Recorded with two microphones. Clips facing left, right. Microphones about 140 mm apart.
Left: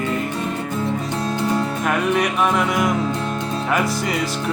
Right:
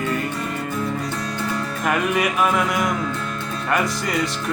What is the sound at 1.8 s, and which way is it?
Speech, centre (ahead or behind).